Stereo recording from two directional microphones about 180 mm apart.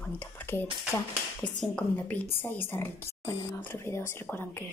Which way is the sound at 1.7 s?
10° left (ahead or behind).